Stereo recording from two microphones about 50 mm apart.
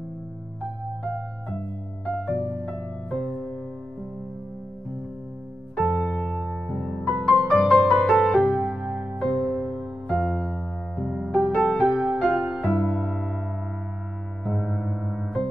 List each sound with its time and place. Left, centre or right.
1.0 s music: centre
5.9 s music: centre
7.2 s music: centre
7.7 s music: centre
8.4 s music: centre
11.5 s music: centre
14.5 s music: centre